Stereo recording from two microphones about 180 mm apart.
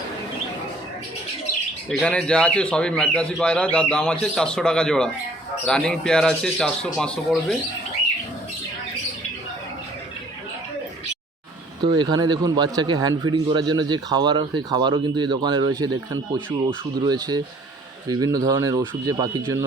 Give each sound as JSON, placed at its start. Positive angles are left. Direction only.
{"t": 1.9, "sound": "speech", "side_deg": 5}
{"t": 11.8, "sound": "a man's voice", "side_deg": -25}